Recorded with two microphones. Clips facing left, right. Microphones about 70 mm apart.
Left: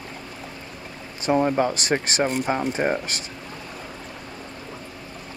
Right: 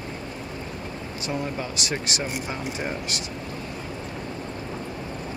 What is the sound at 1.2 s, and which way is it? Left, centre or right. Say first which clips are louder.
Speech: left 10 dB; left.